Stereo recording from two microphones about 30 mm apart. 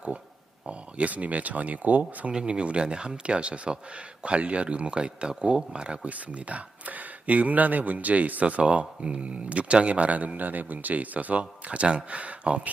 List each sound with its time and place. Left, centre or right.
0.7 s speech: right
2.5 s speech: right
6.1 s speech: right
8.6 s speech: right